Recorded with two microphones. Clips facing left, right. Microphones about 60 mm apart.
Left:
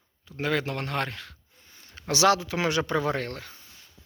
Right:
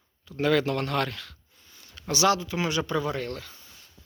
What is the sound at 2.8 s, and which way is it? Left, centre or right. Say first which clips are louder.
Speech: left 2 dB; left.